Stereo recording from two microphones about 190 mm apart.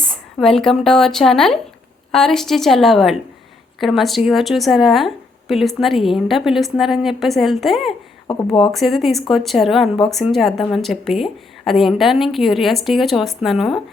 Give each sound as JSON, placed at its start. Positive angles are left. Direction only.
{"t": 0.0, "sound": "speech", "side_deg": 5}
{"t": 8.3, "sound": "speech", "side_deg": 25}
{"t": 8.7, "sound": "speech", "side_deg": 0}